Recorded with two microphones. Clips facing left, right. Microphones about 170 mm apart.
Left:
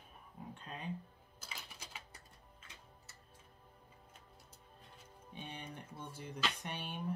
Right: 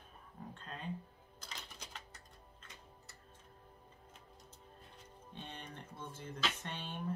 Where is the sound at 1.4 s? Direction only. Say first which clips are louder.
Right 1 dB; 5° left (ahead or behind).